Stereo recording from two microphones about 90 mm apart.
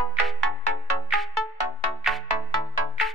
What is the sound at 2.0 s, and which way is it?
Music, centre (ahead or behind).